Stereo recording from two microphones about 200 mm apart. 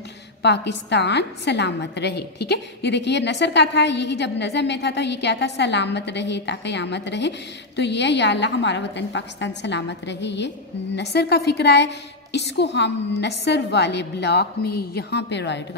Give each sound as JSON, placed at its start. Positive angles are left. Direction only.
{"t": 0.4, "sound": "a woman's voice", "side_deg": 60}